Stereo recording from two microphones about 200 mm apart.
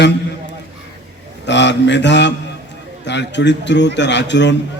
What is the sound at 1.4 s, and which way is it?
A man's voice, 60° left (ahead or behind).